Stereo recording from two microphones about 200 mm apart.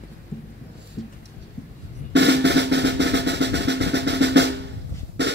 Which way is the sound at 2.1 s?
60° right (ahead or behind).